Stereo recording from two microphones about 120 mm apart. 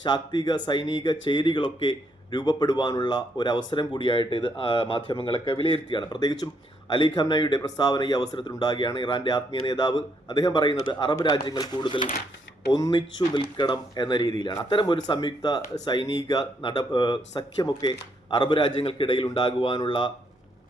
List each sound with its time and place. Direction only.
0.0 s speech: 35° left (ahead or behind)
9.6 s speech: 35° left (ahead or behind)
12.7 s speech: 35° left (ahead or behind)
13.0 s speech: 45° left (ahead or behind)